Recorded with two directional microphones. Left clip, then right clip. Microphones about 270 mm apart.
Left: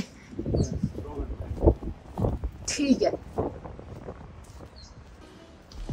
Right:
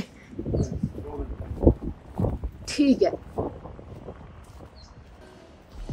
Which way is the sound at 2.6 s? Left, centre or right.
Centre.